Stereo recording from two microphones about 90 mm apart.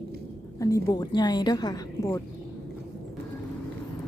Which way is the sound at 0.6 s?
40° left (ahead or behind).